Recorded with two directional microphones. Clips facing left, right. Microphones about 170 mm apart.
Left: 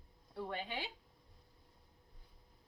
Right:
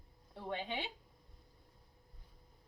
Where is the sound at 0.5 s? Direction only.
20° right (ahead or behind).